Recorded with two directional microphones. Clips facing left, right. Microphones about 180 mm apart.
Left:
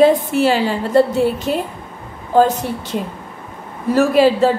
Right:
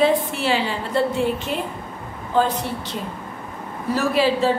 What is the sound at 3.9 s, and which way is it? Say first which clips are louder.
Speech: left 7 dB; 45° left (ahead or behind).